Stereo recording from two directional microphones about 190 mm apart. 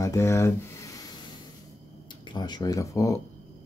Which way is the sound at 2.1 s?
25° left (ahead or behind).